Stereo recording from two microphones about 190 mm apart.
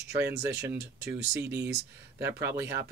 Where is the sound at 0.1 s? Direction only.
15° right (ahead or behind).